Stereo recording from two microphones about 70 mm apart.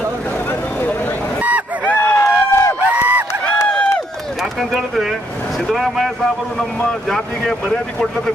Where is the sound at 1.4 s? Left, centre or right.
Right.